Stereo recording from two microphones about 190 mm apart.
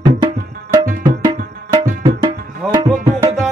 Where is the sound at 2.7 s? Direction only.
20° right (ahead or behind).